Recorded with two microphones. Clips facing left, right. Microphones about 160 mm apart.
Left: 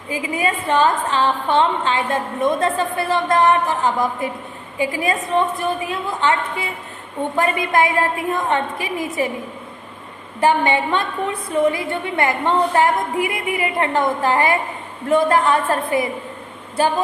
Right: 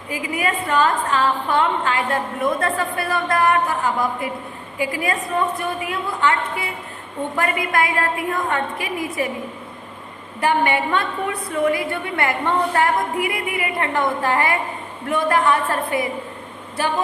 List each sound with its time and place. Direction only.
0.1 s a woman's voice: 25° left (ahead or behind)
4.8 s a woman's voice: 20° left (ahead or behind)
10.4 s a woman's voice: 25° left (ahead or behind)